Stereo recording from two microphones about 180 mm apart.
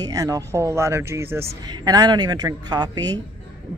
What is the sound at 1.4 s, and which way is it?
Speech, 35° right (ahead or behind).